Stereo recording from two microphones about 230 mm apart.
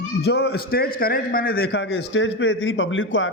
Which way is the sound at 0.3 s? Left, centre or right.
Left.